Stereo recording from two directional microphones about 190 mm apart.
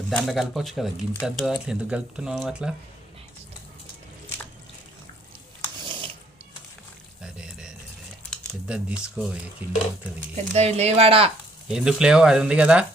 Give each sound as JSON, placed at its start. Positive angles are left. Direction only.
{"t": 0.1, "sound": "speech", "side_deg": 5}
{"t": 7.2, "sound": "pour", "side_deg": -5}
{"t": 8.6, "sound": "speech", "side_deg": -5}
{"t": 10.2, "sound": "speech", "side_deg": -35}
{"t": 11.7, "sound": "speech", "side_deg": -5}